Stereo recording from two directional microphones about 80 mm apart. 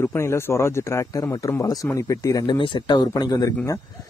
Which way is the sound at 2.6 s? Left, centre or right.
Left.